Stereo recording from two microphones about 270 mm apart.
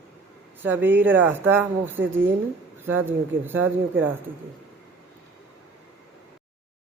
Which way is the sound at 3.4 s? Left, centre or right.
Centre.